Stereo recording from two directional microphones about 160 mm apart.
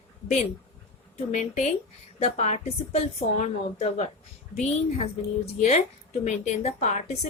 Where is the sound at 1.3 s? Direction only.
45° left (ahead or behind).